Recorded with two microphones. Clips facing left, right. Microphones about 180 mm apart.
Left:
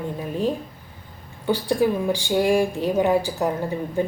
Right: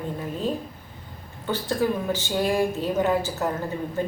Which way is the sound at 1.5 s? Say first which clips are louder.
Left 4 dB; 15° left (ahead or behind).